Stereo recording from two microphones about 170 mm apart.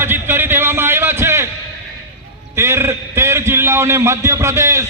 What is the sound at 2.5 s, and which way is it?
A man's voice, 15° right (ahead or behind).